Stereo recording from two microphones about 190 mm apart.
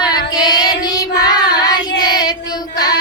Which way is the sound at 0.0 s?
20° left (ahead or behind).